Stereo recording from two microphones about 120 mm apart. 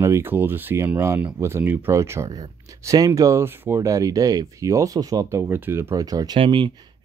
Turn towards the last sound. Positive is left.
turn(degrees=-40)  # may be behind; listen again after turning